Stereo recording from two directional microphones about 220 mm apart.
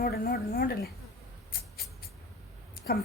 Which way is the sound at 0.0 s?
45° left (ahead or behind).